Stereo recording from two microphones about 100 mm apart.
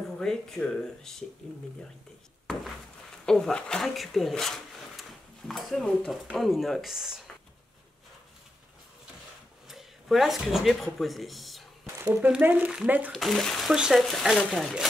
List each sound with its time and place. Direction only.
0.2 s speech: 5° left (ahead or behind)
3.3 s speech: 5° left (ahead or behind)
9.7 s speech: centre (ahead or behind)
11.8 s a sound: 20° right (ahead or behind)
12.3 s speech: 20° right (ahead or behind)
13.1 s speech: centre (ahead or behind)